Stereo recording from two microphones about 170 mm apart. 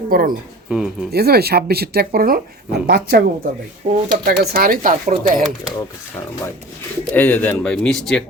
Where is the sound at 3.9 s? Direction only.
45° right (ahead or behind).